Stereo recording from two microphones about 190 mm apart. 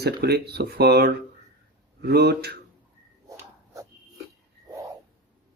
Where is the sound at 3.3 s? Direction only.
15° right (ahead or behind).